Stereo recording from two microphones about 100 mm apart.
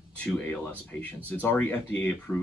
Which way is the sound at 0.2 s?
20° left (ahead or behind).